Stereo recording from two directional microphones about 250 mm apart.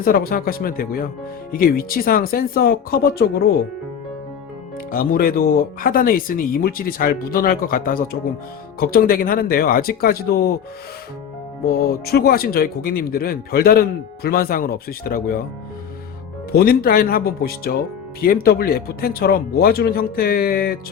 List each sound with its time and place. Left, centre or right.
0.0 s a man's voice: left
4.9 s a man's voice: left
12.0 s a man's voice: left
16.5 s a man's voice: left